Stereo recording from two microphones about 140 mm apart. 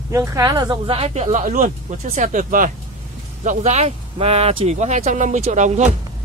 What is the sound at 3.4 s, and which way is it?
Speech, 55° right (ahead or behind).